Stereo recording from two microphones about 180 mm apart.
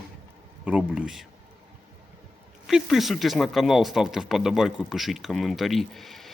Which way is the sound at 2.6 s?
Centre (ahead or behind).